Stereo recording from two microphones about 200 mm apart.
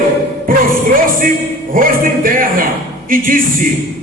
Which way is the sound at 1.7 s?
45° right (ahead or behind).